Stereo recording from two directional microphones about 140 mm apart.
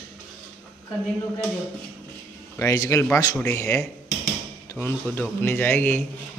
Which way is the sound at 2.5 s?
20° left (ahead or behind).